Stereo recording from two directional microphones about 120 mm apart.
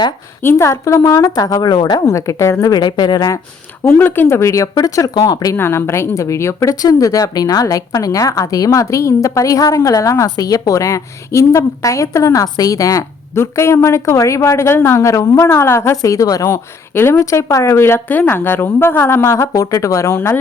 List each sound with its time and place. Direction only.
0.4 s a woman's voice: 25° left (ahead or behind)
3.8 s a woman's voice: 15° left (ahead or behind)